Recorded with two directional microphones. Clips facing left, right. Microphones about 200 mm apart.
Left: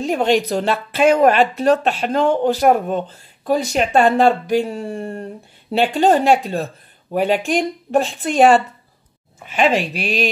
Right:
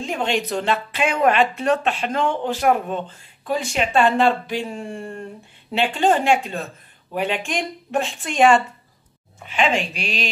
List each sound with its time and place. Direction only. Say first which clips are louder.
0.0 s speech: left 6 dB; 40° left (ahead or behind)
9.4 s speech: left 2 dB; centre (ahead or behind)
10.0 s a sound: left 7 dB; 50° left (ahead or behind)